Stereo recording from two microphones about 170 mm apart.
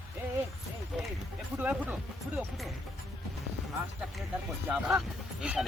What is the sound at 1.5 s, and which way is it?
Speech, 10° right (ahead or behind).